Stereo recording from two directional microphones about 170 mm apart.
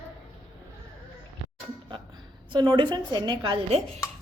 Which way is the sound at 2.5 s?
30° right (ahead or behind).